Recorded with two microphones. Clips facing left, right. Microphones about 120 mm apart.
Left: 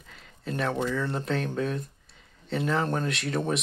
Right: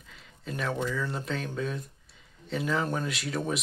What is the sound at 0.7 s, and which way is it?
Speech, 20° left (ahead or behind).